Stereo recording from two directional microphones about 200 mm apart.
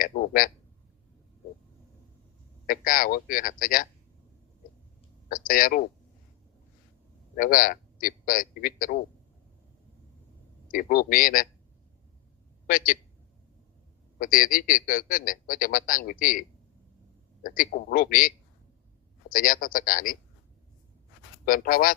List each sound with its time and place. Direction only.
0.0 s a sound: 45° left (ahead or behind)
2.6 s speech: 45° left (ahead or behind)
5.3 s speech: 45° left (ahead or behind)
7.3 s speech: 45° left (ahead or behind)
10.7 s speech: 45° left (ahead or behind)
12.6 s speech: 45° left (ahead or behind)
14.2 s speech: 45° left (ahead or behind)
21.4 s speech: 45° left (ahead or behind)